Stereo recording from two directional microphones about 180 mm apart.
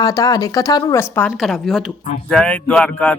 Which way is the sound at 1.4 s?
Centre (ahead or behind).